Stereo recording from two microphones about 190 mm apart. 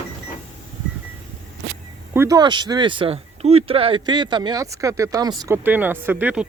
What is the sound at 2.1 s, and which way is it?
Speech, 20° right (ahead or behind).